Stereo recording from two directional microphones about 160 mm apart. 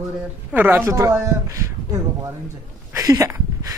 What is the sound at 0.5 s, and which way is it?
Speech, 10° right (ahead or behind).